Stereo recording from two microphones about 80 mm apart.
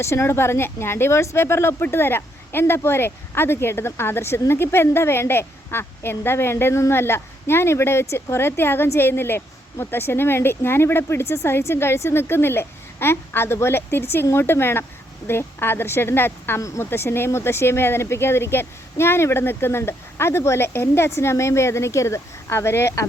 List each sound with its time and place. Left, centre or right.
0.0 s a woman's voice: left